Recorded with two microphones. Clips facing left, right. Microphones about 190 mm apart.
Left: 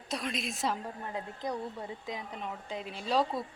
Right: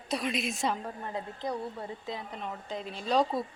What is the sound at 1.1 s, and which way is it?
Speech, 10° left (ahead or behind).